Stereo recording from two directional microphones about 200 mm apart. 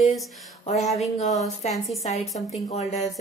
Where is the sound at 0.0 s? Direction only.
Centre (ahead or behind).